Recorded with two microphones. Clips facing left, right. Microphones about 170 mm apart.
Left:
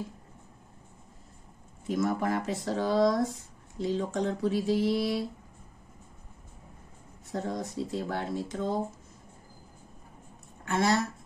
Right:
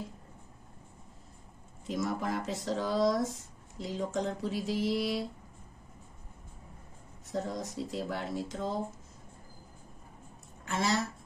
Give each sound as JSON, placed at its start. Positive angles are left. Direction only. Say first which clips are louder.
{"t": 2.0, "sound": "speech", "louder": "left 4 dB", "side_deg": 55}
{"t": 7.3, "sound": "speech", "louder": "left 2 dB", "side_deg": 55}
{"t": 10.6, "sound": "speech", "louder": "left 5 dB", "side_deg": 55}